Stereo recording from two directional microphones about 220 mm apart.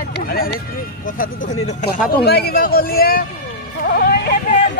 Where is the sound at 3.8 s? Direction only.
45° left (ahead or behind).